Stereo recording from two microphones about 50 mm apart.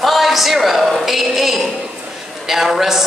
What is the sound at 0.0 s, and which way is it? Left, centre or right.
A woman's voice, centre.